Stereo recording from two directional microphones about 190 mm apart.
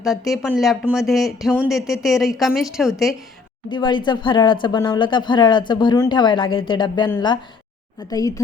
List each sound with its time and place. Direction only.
0.0 s speech: centre (ahead or behind)
3.7 s speech: 25° left (ahead or behind)